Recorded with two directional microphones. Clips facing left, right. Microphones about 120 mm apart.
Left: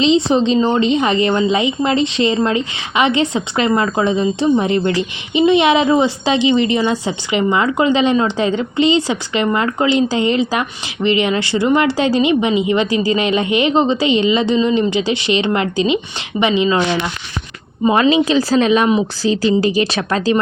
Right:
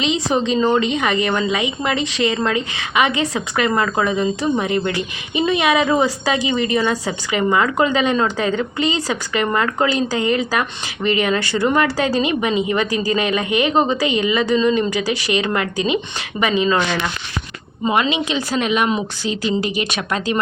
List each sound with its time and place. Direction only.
0.0 s a woman's voice: 30° left (ahead or behind)
17.9 s speech: 35° left (ahead or behind)